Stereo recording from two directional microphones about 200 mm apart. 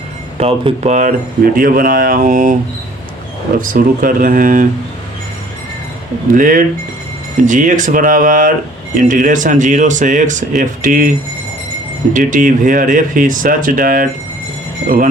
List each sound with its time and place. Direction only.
0.3 s speech: 30° right (ahead or behind)
3.6 s speech: 45° right (ahead or behind)
6.3 s speech: 45° right (ahead or behind)
12.1 s speech: 40° right (ahead or behind)